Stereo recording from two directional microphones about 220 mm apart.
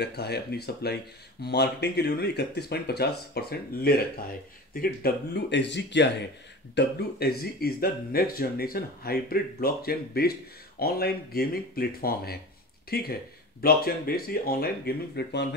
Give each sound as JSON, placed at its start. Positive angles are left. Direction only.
{"t": 0.0, "sound": "speech", "side_deg": 50}